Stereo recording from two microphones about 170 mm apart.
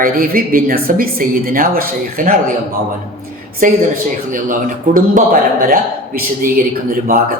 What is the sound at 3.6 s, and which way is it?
Speech, 50° right (ahead or behind).